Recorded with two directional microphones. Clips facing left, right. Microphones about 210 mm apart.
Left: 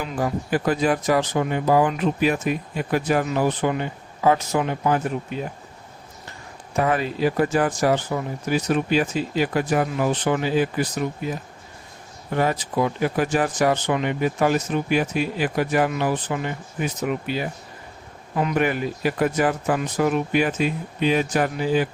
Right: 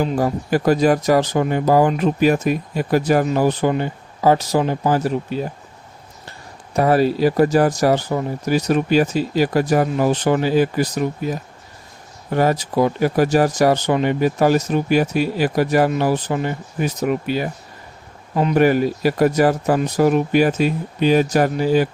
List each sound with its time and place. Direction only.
0.0 s speech: 40° right (ahead or behind)
6.7 s speech: 35° right (ahead or behind)